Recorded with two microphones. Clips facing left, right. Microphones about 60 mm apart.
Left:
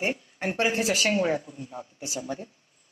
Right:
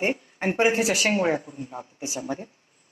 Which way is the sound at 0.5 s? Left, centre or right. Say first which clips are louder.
Right 4 dB; right.